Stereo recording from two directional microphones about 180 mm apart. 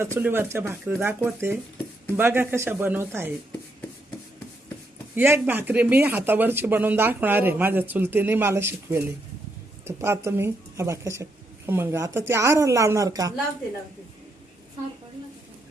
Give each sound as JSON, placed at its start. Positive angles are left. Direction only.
{"t": 0.0, "sound": "speech", "side_deg": -10}
{"t": 5.1, "sound": "speech", "side_deg": -10}